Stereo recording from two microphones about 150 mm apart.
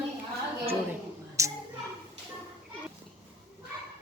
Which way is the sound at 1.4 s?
20° right (ahead or behind).